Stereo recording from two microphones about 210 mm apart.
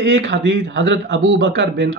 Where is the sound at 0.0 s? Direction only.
55° right (ahead or behind).